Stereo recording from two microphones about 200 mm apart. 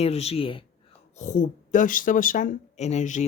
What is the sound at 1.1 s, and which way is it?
Speech, 40° left (ahead or behind).